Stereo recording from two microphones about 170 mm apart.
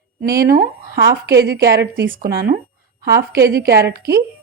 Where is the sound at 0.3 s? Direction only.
60° right (ahead or behind).